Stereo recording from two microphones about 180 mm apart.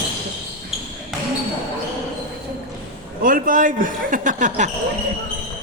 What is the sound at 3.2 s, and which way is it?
Speech, 50° right (ahead or behind).